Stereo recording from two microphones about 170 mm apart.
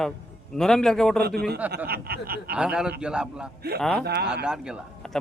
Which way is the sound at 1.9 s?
65° right (ahead or behind).